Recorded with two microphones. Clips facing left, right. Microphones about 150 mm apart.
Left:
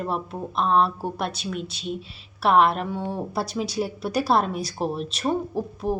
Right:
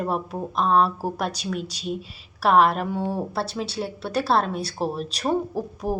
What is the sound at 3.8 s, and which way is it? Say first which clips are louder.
A woman's voice: left 1 dB; 5° left (ahead or behind).